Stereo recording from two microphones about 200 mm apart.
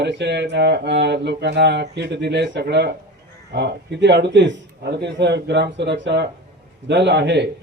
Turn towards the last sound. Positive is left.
turn(degrees=-60)  # may be behind; listen again after turning